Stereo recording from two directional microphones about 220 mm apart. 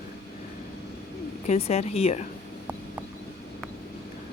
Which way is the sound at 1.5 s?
30° left (ahead or behind).